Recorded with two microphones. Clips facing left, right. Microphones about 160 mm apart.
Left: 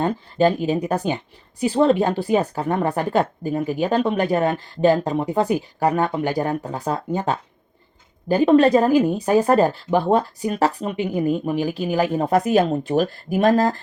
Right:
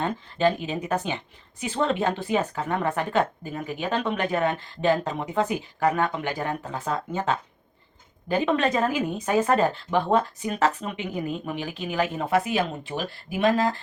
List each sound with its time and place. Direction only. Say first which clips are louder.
0.0 s speech: left 5 dB; 40° left (ahead or behind)